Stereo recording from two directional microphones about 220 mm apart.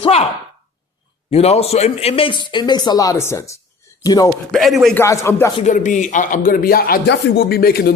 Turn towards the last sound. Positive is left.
turn(degrees=45)  # may be behind; listen again after turning